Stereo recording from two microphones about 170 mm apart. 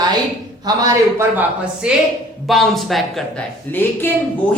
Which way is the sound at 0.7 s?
20° right (ahead or behind).